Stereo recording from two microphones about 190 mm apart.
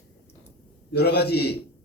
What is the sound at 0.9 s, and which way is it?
Speech, 60° left (ahead or behind).